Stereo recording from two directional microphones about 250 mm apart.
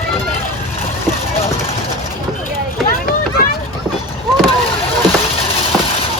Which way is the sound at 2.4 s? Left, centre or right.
Left.